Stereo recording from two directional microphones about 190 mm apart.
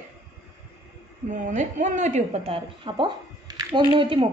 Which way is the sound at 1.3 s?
40° right (ahead or behind).